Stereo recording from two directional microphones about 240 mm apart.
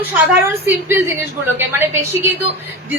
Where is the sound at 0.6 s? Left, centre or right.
Centre.